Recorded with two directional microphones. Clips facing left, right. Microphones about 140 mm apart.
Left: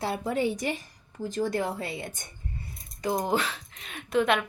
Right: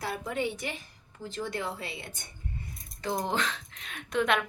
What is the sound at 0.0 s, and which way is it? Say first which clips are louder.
A woman's voice: left 5 dB; 30° left (ahead or behind).